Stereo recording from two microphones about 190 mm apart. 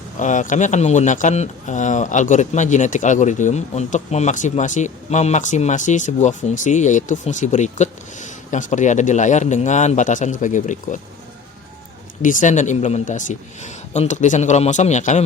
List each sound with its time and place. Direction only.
0.2 s speech: 40° left (ahead or behind)
12.2 s speech: 45° left (ahead or behind)